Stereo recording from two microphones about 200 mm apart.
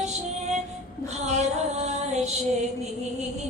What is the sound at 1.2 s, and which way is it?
Female singing, 35° right (ahead or behind).